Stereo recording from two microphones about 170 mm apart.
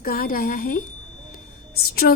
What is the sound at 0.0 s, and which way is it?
Speech, 60° left (ahead or behind).